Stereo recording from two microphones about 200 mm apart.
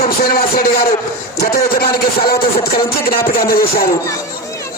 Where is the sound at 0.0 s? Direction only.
50° left (ahead or behind).